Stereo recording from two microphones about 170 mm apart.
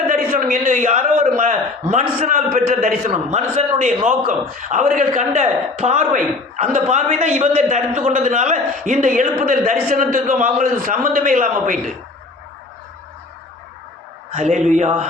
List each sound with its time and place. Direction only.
0.1 s a man's voice: 55° right (ahead or behind)
14.3 s a man's voice: 45° right (ahead or behind)